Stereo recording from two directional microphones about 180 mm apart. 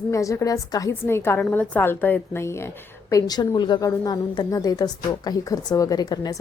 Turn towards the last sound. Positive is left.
turn(degrees=20)  # may be behind; listen again after turning